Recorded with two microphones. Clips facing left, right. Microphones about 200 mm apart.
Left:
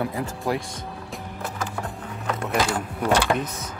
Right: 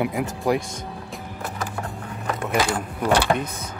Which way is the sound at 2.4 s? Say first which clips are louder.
Right 1 dB; centre (ahead or behind).